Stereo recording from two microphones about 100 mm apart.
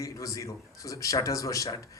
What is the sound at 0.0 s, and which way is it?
Speech, 35° left (ahead or behind).